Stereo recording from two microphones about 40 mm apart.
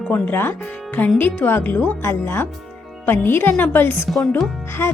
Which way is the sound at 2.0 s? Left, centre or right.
Left.